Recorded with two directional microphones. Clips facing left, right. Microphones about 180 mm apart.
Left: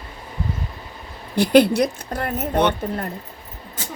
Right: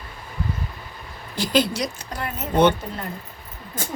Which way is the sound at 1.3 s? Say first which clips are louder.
Left 7 dB; 60° left (ahead or behind).